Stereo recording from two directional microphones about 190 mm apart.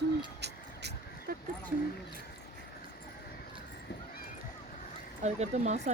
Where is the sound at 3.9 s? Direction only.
60° left (ahead or behind).